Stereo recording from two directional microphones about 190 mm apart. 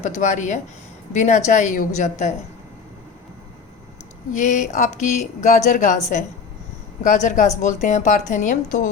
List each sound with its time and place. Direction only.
0.0 s speech: 40° left (ahead or behind)
4.4 s speech: 40° left (ahead or behind)